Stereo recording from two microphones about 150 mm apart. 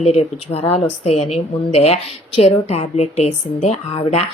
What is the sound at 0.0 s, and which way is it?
A woman's voice, 45° left (ahead or behind).